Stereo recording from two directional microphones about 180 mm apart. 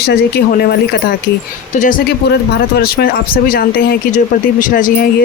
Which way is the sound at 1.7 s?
45° left (ahead or behind).